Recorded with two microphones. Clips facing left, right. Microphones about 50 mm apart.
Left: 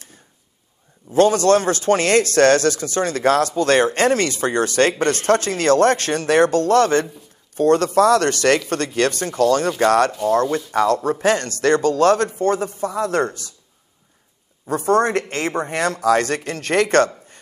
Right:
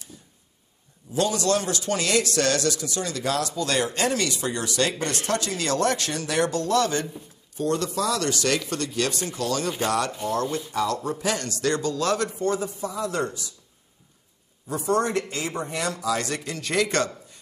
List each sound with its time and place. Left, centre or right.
1.1 s a man's voice: left
14.7 s a man's voice: left